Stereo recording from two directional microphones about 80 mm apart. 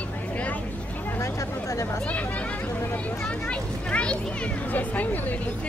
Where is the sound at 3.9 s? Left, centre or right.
Centre.